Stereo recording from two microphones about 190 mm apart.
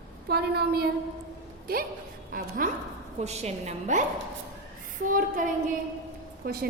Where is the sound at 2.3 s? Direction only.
45° right (ahead or behind).